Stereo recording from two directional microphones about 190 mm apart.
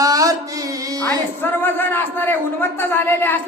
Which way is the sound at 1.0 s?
10° left (ahead or behind).